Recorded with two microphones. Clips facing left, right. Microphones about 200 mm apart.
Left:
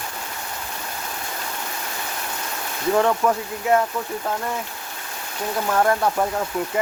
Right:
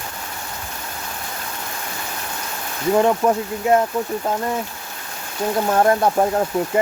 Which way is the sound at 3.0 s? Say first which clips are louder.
Right 3 dB; 20° right (ahead or behind).